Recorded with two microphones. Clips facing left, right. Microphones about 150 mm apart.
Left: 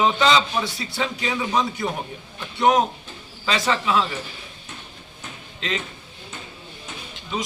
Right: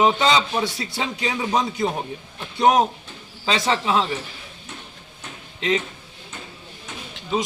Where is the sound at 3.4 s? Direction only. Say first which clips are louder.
Right 1 dB; 25° right (ahead or behind).